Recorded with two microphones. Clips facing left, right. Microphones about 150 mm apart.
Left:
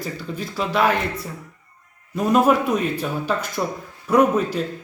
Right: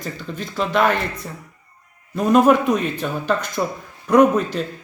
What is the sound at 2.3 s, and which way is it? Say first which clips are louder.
Speech: right 3 dB; 5° left (ahead or behind).